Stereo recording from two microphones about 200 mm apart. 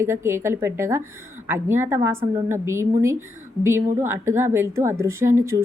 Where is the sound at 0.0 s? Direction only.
15° right (ahead or behind).